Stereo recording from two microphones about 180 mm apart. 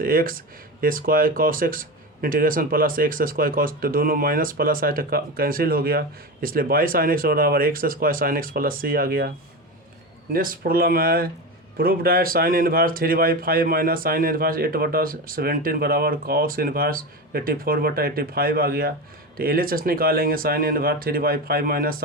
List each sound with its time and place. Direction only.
0.0 s speech: 55° right (ahead or behind)
10.3 s speech: 50° right (ahead or behind)